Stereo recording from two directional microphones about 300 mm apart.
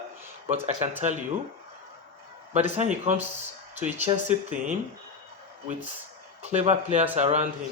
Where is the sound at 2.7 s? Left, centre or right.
Right.